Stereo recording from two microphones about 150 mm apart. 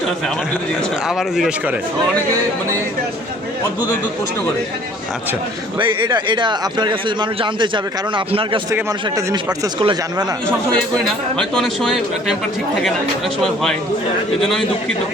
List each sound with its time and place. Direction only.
1.0 s speech: 5° right (ahead or behind)
5.8 s speech: 30° right (ahead or behind)
9.8 s speech: 30° right (ahead or behind)
10.7 s speech: 5° left (ahead or behind)
13.4 s speech: centre (ahead or behind)